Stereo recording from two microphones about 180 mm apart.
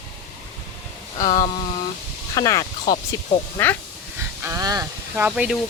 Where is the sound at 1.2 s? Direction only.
20° left (ahead or behind).